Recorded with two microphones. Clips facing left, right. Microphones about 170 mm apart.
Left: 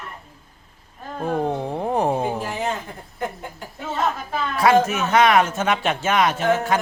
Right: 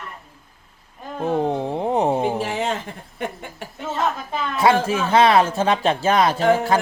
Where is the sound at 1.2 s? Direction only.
20° right (ahead or behind).